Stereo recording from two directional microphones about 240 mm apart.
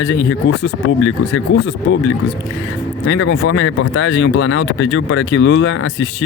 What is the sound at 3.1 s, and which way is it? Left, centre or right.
Speech, left.